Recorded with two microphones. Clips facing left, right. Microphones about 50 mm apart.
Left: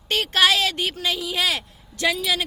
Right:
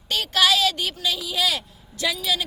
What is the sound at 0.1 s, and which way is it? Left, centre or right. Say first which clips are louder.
Speech: left 1 dB; left.